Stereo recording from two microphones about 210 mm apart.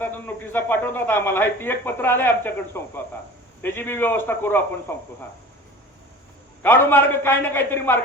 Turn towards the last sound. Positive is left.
turn(degrees=10)  # may be behind; listen again after turning